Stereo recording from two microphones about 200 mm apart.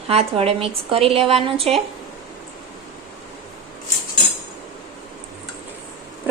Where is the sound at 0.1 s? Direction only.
30° right (ahead or behind).